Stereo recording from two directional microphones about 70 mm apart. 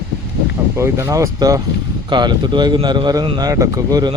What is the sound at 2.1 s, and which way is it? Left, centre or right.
Speech, right.